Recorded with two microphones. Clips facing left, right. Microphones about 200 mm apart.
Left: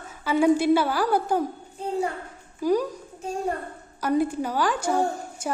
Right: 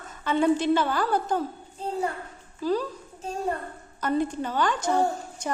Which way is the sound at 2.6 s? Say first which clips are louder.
Left 3 dB; 15° left (ahead or behind).